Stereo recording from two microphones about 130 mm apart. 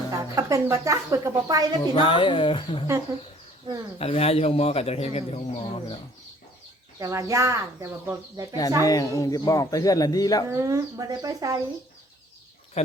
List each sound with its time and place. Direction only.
0.1 s speech: 25° right (ahead or behind)
1.8 s speech: 40° left (ahead or behind)
3.9 s speech: 50° left (ahead or behind)
7.0 s speech: 25° right (ahead or behind)
8.8 s speech: 25° left (ahead or behind)
10.5 s speech: 25° right (ahead or behind)
12.8 s speech: 55° left (ahead or behind)